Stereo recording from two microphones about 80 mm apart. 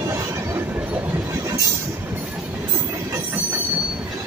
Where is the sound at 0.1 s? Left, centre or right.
Right.